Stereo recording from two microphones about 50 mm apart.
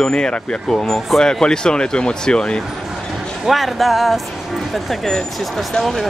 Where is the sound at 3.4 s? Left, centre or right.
Centre.